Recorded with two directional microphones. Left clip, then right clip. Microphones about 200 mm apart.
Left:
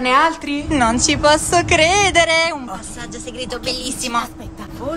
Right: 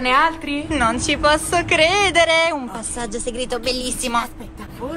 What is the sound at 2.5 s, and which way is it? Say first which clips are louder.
A woman's voice: right 1 dB; 10° right (ahead or behind).